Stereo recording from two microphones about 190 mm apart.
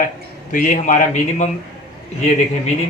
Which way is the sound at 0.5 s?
40° left (ahead or behind).